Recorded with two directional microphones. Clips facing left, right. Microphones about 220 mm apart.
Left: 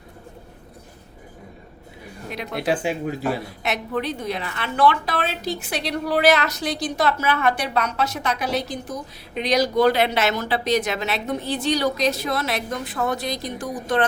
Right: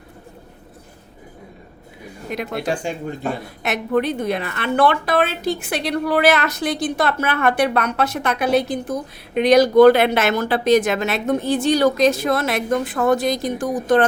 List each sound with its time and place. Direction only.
2.3 s speech: 50° right (ahead or behind)
2.6 s speech: 5° left (ahead or behind)
3.6 s a woman's voice: 50° right (ahead or behind)